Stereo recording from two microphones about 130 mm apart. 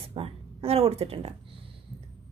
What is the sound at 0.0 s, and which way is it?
Speech, 45° right (ahead or behind).